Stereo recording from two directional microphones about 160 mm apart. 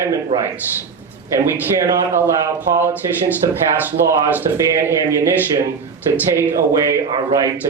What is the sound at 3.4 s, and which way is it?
Speech, 25° right (ahead or behind).